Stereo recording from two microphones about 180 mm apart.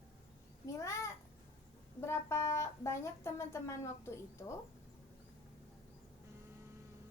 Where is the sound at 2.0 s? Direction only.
15° left (ahead or behind).